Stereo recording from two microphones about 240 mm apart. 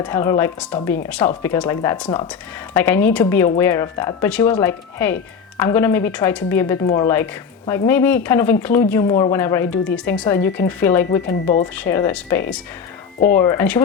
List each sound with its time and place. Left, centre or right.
0.0 s speech: centre
11.3 s speech: left
11.8 s speech: centre
13.1 s speech: left
13.4 s speech: centre